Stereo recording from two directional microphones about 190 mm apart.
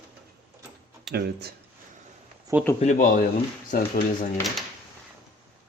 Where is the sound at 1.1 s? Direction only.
60° right (ahead or behind).